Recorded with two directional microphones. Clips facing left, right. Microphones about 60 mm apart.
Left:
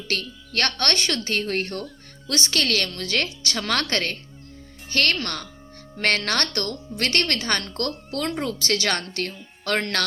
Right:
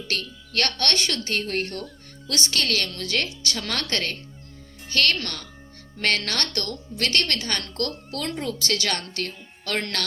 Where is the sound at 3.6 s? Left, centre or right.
Left.